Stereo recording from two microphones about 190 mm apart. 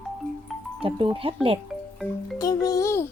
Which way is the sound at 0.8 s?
30° right (ahead or behind).